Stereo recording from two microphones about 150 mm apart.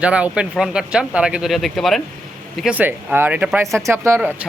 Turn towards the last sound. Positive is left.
turn(degrees=-10)  # may be behind; listen again after turning